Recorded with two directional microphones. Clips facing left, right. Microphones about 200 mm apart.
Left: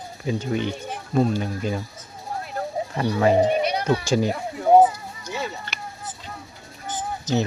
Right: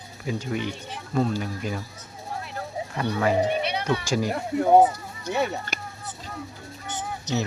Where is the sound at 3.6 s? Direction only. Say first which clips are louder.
Left 4 dB; 40° left (ahead or behind).